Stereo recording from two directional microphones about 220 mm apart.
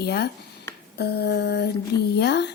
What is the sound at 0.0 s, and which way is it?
Speech, 50° left (ahead or behind).